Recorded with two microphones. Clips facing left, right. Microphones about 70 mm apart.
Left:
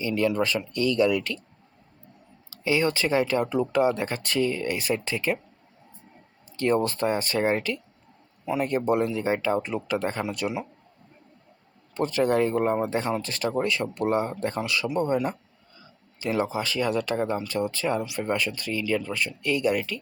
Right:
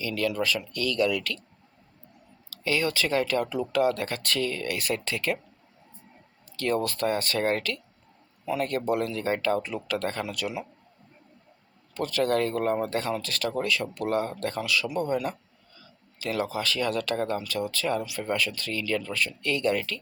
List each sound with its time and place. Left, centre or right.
0.0 s speech: left
2.5 s speech: left
6.6 s speech: left
11.9 s speech: left